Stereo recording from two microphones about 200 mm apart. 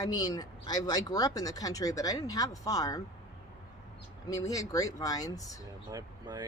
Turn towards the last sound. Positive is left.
turn(degrees=-20)  # may be behind; listen again after turning